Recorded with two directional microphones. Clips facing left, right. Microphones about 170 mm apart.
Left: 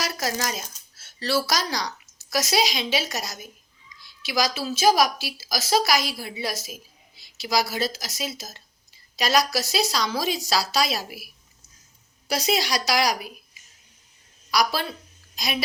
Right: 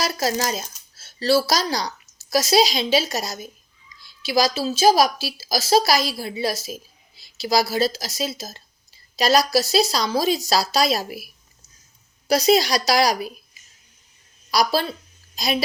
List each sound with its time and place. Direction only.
0.0 s a woman's voice: 30° right (ahead or behind)
12.3 s a woman's voice: 40° right (ahead or behind)
14.5 s a woman's voice: 30° right (ahead or behind)